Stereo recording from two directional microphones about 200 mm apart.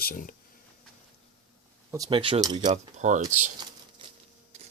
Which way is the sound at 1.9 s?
20° right (ahead or behind).